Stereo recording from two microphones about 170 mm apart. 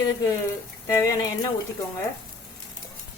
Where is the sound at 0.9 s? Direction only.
20° left (ahead or behind).